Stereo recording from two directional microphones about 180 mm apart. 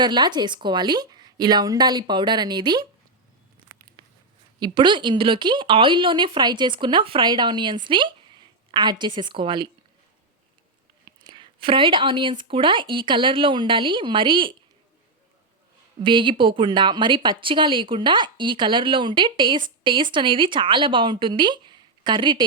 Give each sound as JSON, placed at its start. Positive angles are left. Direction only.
{"t": 0.0, "sound": "a woman's voice", "side_deg": -25}
{"t": 4.6, "sound": "a woman's voice", "side_deg": -25}
{"t": 11.2, "sound": "a woman's voice", "side_deg": -25}
{"t": 16.0, "sound": "a woman's voice", "side_deg": -25}